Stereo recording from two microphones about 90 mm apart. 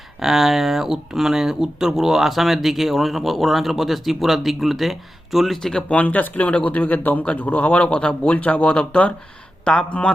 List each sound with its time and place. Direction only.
0.2 s speech: 5° right (ahead or behind)
5.9 s speech: 15° left (ahead or behind)